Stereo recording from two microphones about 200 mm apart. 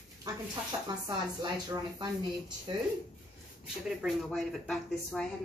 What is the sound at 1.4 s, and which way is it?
Speech, 20° right (ahead or behind).